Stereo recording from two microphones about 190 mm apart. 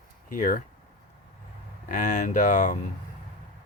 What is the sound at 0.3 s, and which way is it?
Speech, 45° left (ahead or behind).